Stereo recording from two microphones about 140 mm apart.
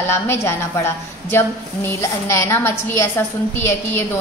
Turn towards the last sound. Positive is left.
turn(degrees=15)  # may be behind; listen again after turning